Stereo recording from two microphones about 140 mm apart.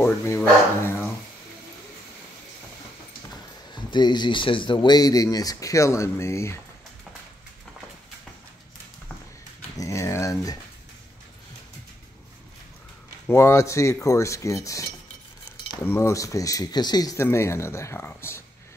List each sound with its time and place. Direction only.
0.0 s speech: 15° left (ahead or behind)
3.7 s speech: 30° left (ahead or behind)
9.8 s dog: 20° left (ahead or behind)
13.3 s speech: 20° left (ahead or behind)